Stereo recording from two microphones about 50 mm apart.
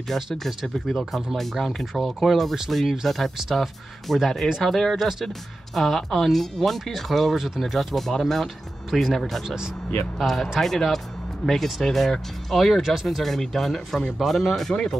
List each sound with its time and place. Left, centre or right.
0.1 s speech: centre